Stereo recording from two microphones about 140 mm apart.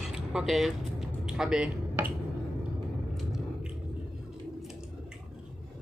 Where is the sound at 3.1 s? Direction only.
Centre (ahead or behind).